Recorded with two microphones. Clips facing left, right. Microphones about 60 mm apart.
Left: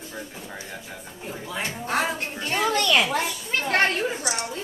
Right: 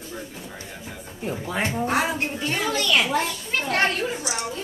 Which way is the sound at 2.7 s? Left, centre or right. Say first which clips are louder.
Left 1 dB; left.